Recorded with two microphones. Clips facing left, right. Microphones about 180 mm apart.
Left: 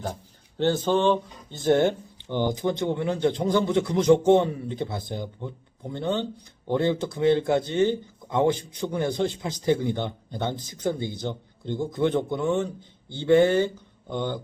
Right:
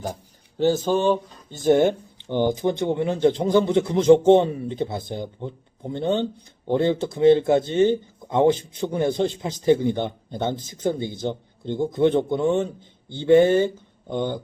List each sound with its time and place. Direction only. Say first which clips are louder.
0.6 s speech: right 2 dB; 10° right (ahead or behind)